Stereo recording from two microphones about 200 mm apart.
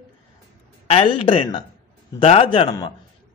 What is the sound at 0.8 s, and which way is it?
Speech, 30° left (ahead or behind).